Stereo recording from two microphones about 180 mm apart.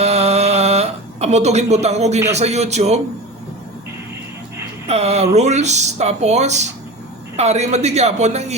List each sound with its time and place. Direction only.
0.0 s a sound: 35° right (ahead or behind)
2.3 s speech: 35° right (ahead or behind)
4.9 s speech: 35° right (ahead or behind)